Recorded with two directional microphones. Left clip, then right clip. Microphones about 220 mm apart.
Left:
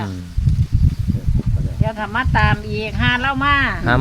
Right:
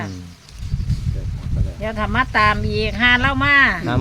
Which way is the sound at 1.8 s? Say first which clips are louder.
Right 1 dB; 50° right (ahead or behind).